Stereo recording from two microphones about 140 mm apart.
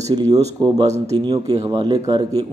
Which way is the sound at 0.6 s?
35° right (ahead or behind).